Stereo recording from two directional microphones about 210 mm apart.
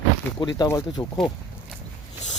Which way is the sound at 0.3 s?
20° left (ahead or behind).